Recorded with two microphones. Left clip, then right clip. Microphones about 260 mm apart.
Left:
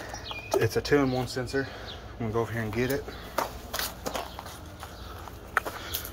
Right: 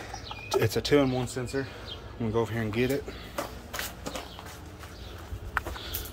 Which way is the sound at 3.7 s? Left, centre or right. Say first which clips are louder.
Left 3 dB; left.